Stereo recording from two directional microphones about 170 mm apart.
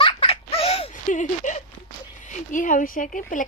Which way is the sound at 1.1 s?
45° left (ahead or behind).